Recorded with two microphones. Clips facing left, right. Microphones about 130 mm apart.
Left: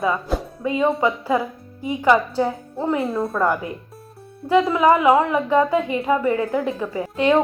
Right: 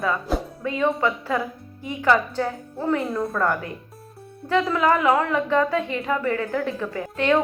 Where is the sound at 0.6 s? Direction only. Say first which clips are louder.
Left 4 dB; 15° left (ahead or behind).